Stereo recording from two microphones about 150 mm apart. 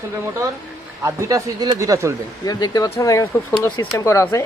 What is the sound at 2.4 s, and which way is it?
Speech, 25° left (ahead or behind).